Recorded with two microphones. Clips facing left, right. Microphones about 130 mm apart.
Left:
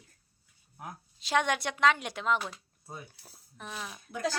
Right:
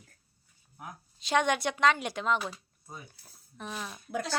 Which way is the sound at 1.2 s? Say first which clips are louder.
Right 2 dB; centre (ahead or behind).